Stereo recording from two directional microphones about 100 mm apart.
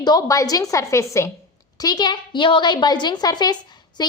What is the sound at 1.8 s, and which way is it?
A woman's voice, 40° left (ahead or behind).